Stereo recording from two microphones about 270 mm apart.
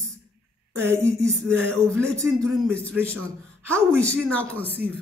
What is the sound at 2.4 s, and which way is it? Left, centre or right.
Speech, centre.